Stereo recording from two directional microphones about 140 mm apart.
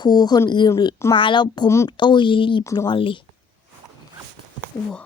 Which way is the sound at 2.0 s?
35° left (ahead or behind).